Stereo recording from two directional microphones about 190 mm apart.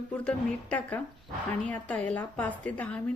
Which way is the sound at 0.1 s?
5° left (ahead or behind).